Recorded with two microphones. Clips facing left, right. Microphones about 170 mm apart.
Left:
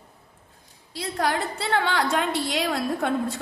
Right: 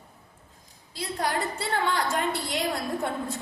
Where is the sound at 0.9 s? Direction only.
80° left.